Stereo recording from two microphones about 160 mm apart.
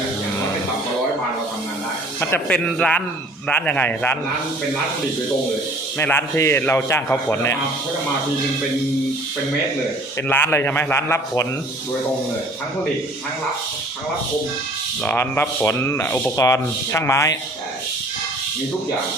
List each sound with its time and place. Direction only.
2.3 s speech: 10° left (ahead or behind)
6.0 s speech: 15° left (ahead or behind)
10.2 s speech: 15° left (ahead or behind)
15.0 s speech: 15° left (ahead or behind)